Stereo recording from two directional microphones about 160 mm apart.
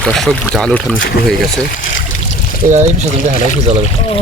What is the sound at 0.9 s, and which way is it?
Speech, 65° left (ahead or behind).